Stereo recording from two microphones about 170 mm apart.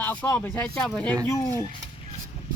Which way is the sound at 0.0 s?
10° left (ahead or behind).